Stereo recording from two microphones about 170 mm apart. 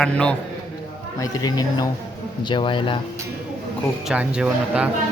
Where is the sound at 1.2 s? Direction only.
20° left (ahead or behind).